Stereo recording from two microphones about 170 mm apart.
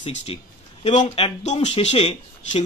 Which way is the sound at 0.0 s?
35° left (ahead or behind).